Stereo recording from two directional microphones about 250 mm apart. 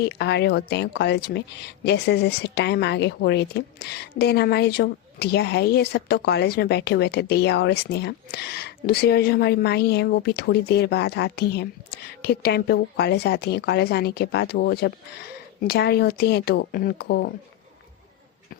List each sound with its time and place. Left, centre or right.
0.0 s a woman's voice: left